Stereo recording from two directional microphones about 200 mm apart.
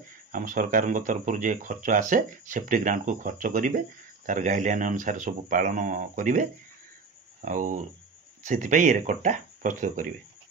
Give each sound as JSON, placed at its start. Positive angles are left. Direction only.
{"t": 0.3, "sound": "speech", "side_deg": -40}
{"t": 7.4, "sound": "speech", "side_deg": -40}